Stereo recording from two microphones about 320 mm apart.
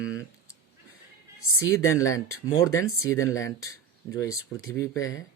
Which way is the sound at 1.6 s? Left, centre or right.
Centre.